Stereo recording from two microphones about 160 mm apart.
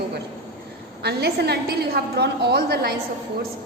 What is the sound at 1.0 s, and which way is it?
A woman's voice, 90° right.